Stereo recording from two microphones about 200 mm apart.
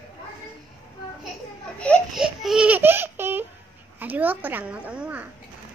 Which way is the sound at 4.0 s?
10° right (ahead or behind).